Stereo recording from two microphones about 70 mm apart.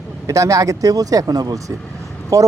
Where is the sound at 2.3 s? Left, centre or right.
Right.